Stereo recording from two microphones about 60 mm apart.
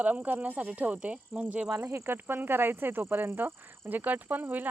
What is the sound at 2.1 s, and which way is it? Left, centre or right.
Speech, right.